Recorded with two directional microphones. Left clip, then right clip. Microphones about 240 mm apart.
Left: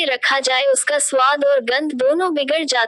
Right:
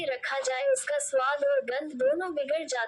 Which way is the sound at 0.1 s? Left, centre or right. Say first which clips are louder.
Left 13 dB; left.